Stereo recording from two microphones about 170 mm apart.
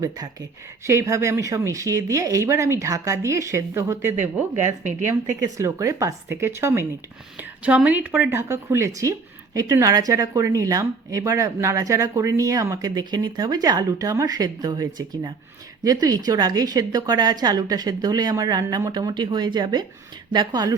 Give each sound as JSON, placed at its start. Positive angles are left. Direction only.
{"t": 0.9, "sound": "speech", "side_deg": -15}
{"t": 4.5, "sound": "speech", "side_deg": -45}
{"t": 5.4, "sound": "speech", "side_deg": -20}